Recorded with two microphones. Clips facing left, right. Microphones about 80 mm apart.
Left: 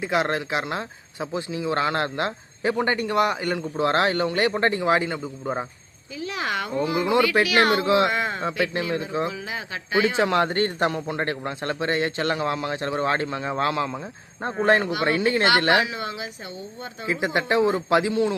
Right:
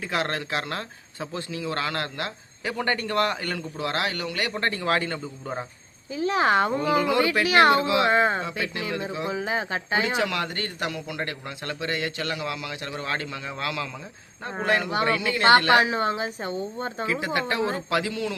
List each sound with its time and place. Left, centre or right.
0.0 s speech: centre
6.1 s speech: right
7.8 s speech: left
8.0 s speech: right
8.6 s a man's voice: left
9.3 s speech: right
10.2 s a man's voice: left
15.7 s speech: right
17.1 s speech: left